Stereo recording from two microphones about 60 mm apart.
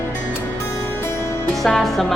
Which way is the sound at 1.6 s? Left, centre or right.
Centre.